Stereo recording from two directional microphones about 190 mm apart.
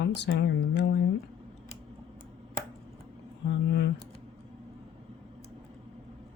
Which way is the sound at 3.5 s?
65° left (ahead or behind).